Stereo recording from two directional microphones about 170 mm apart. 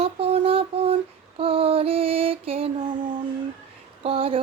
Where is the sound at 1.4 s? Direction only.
35° right (ahead or behind).